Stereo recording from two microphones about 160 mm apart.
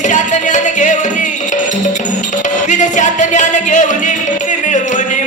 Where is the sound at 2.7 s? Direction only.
50° left (ahead or behind).